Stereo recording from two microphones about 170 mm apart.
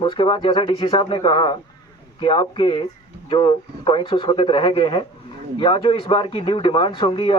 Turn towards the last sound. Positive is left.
turn(degrees=30)  # may be behind; listen again after turning